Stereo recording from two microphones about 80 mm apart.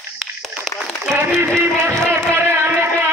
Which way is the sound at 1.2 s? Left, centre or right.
Right.